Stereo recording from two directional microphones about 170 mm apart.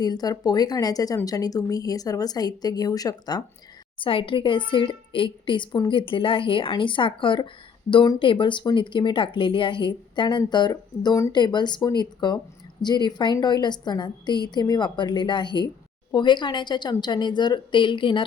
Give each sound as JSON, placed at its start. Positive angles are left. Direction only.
{"t": 0.0, "sound": "a woman's voice", "side_deg": 25}